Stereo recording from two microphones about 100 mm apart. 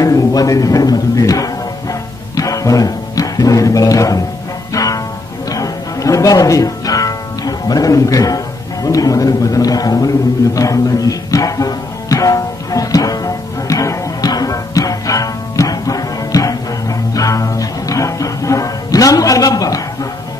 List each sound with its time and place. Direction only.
0.0 s music: 35° left (ahead or behind)
8.8 s a sound: 35° left (ahead or behind)
17.1 s music: 35° left (ahead or behind)